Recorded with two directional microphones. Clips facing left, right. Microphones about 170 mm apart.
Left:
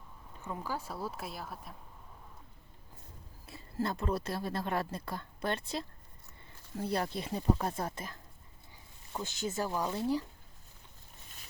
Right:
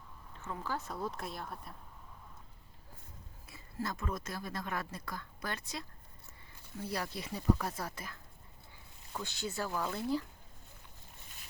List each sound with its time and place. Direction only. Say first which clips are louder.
0.3 s speech: left 1 dB; 15° left (ahead or behind)
3.8 s a woman's voice: left 5 dB; 30° left (ahead or behind)
6.9 s a woman's voice: left 5 dB; 25° left (ahead or behind)
9.1 s a woman's voice: left 3 dB; 20° left (ahead or behind)